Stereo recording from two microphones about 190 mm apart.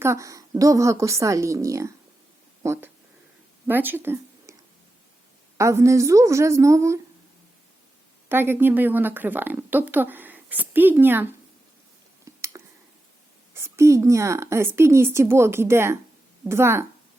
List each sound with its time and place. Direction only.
0.0 s a woman's voice: 15° right (ahead or behind)
5.5 s a woman's voice: 15° right (ahead or behind)
8.3 s a woman's voice: 10° right (ahead or behind)
12.2 s a sound: 15° right (ahead or behind)
13.5 s a woman's voice: 15° right (ahead or behind)